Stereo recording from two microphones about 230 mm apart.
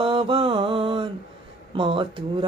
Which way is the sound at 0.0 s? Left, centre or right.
Right.